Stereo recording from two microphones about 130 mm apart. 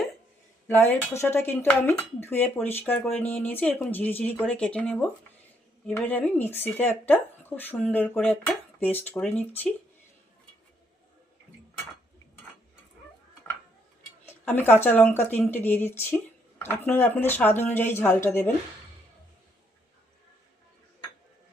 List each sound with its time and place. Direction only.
0.7 s speech: 15° left (ahead or behind)
14.4 s speech: 15° left (ahead or behind)